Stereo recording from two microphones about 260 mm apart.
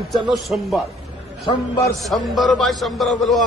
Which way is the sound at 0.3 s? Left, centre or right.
Centre.